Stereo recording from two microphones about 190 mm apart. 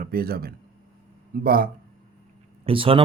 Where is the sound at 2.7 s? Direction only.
30° right (ahead or behind).